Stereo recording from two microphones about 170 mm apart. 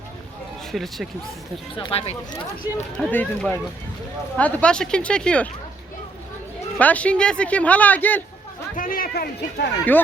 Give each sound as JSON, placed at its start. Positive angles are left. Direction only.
{"t": 0.7, "sound": "speech", "side_deg": 0}
{"t": 1.7, "sound": "speech", "side_deg": 30}
{"t": 2.6, "sound": "speech", "side_deg": -10}
{"t": 3.0, "sound": "speech", "side_deg": 5}
{"t": 6.7, "sound": "speech", "side_deg": 10}
{"t": 8.7, "sound": "a man's voice", "side_deg": 55}